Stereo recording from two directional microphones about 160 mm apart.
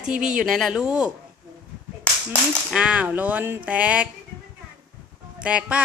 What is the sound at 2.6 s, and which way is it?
A woman's voice, 5° right (ahead or behind).